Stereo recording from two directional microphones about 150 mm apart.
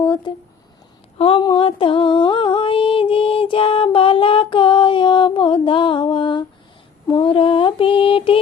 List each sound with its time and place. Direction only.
0.0 s a sound: 30° left (ahead or behind)
1.2 s a woman's voice: 35° left (ahead or behind)
1.5 s music: 35° left (ahead or behind)
7.1 s mantra: 35° left (ahead or behind)